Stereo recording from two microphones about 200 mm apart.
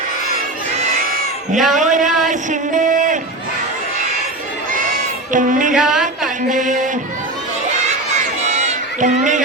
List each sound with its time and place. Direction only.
1.5 s a man's voice: 40° right (ahead or behind)
2.3 s music: 40° right (ahead or behind)
5.3 s a man's voice: 40° right (ahead or behind)
5.7 s a sound: 5° right (ahead or behind)
6.5 s a man's voice: 40° right (ahead or behind)
8.5 s a sound: 40° right (ahead or behind)